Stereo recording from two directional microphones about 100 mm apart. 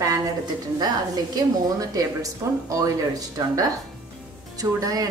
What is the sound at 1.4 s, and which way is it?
Speech, 40° right (ahead or behind).